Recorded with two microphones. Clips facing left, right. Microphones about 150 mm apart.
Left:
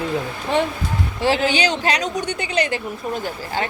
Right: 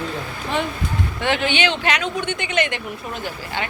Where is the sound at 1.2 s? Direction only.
35° left (ahead or behind).